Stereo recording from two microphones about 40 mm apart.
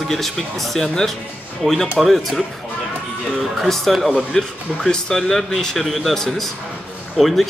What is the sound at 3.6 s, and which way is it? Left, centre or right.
Speech, centre.